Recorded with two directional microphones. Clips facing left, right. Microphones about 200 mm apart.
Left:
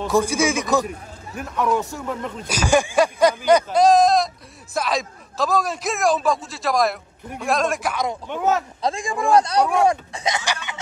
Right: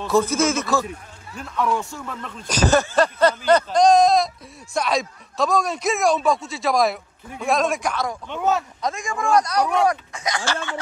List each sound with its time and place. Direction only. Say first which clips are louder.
0.0 s a man's voice: even; 15° left (ahead or behind)
8.3 s speech: left 1 dB; 15° left (ahead or behind)
8.8 s speech: left 4 dB; 30° left (ahead or behind)